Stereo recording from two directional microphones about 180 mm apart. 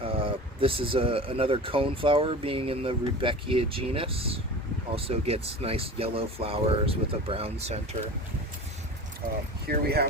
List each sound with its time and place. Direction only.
0.0 s speech: 30° right (ahead or behind)
9.6 s speech: 60° right (ahead or behind)